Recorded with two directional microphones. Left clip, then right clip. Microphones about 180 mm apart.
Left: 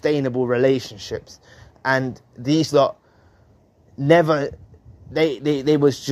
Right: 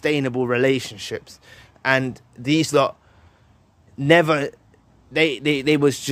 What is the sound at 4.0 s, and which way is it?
Speech, 15° right (ahead or behind).